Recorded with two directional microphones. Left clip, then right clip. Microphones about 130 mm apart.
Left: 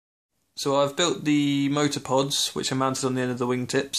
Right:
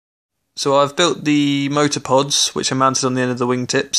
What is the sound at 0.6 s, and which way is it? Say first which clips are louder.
Speech: right 8 dB; 50° right (ahead or behind).